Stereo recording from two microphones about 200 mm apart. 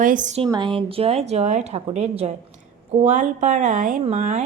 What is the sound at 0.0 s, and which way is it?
Speech, 40° right (ahead or behind).